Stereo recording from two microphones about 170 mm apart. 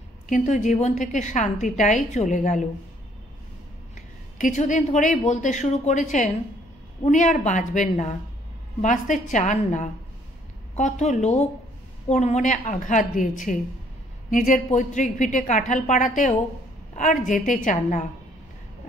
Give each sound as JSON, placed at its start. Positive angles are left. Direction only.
{"t": 0.3, "sound": "a woman's voice", "side_deg": 45}
{"t": 3.9, "sound": "a woman's voice", "side_deg": 50}